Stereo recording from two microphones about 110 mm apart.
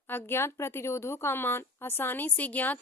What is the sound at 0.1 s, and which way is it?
A woman's voice, 20° left (ahead or behind).